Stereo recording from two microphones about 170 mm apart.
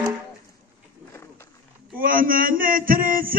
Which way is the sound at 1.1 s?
15° left (ahead or behind).